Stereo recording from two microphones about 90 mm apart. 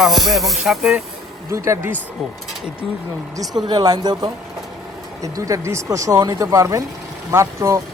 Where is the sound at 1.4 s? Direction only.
30° right (ahead or behind).